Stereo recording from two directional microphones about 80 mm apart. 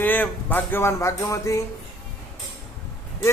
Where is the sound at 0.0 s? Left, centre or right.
Left.